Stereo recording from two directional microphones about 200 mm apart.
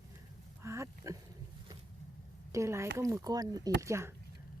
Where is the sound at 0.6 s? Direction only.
15° right (ahead or behind).